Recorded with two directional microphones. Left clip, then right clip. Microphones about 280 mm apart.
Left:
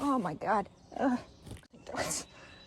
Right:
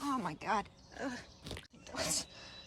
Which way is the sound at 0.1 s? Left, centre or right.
Centre.